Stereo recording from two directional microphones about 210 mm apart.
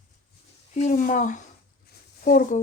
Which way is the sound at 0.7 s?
35° left (ahead or behind).